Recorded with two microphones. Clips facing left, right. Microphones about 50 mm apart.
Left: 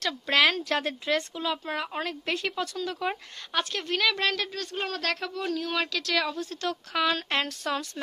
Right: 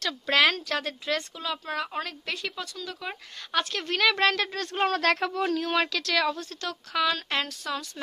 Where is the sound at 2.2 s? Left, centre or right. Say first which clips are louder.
Left 4 dB; left.